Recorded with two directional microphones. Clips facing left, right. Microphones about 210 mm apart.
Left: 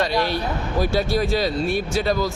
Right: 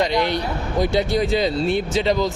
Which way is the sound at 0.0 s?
20° right (ahead or behind).